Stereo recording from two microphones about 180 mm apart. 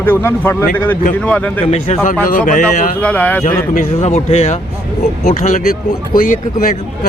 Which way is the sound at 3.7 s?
45° left (ahead or behind).